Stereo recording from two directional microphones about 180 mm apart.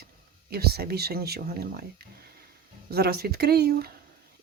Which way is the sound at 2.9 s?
60° right (ahead or behind).